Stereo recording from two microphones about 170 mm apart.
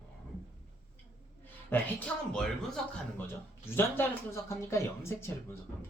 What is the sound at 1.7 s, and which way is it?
Speech, 5° left (ahead or behind).